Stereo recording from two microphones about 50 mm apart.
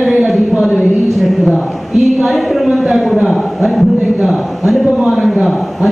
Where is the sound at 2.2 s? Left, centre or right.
Centre.